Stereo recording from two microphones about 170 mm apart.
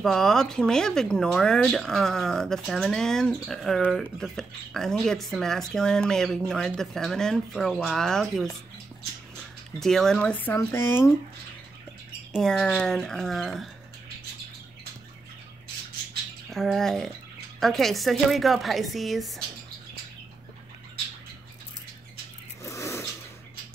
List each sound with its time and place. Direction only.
0.0 s speech: centre (ahead or behind)
9.8 s speech: centre (ahead or behind)
12.3 s speech: centre (ahead or behind)
16.4 s speech: centre (ahead or behind)
22.6 s cat: 15° left (ahead or behind)